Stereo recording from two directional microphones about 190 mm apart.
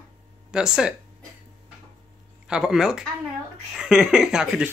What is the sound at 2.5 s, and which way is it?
Speech, 5° right (ahead or behind).